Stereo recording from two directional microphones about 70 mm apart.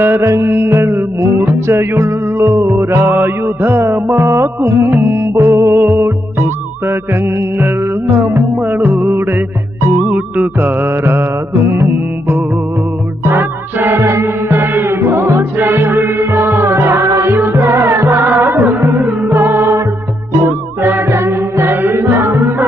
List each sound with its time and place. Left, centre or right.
0.0 s music: right
8.5 s music: right
13.2 s music: right
14.0 s music: right